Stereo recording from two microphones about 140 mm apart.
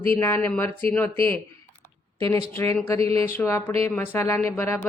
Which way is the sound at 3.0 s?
45° right (ahead or behind).